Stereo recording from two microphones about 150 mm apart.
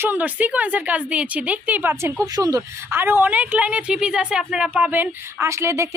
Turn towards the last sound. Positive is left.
turn(degrees=-20)  # may be behind; listen again after turning